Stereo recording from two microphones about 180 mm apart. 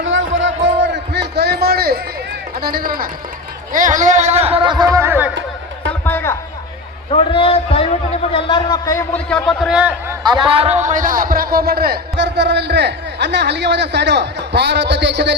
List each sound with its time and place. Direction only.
0.0 s a sound: 90° right; by 2.0 s 60° right (ahead or behind)
2.6 s speech: 55° right (ahead or behind); by 5.3 s 15° right (ahead or behind)
6.1 s a sound: 10° left (ahead or behind)
7.1 s a man's voice: 30° left (ahead or behind)
9.3 s a man's voice: centre (ahead or behind)
10.2 s a man's voice: 25° right (ahead or behind); by 15.4 s 70° right (ahead or behind)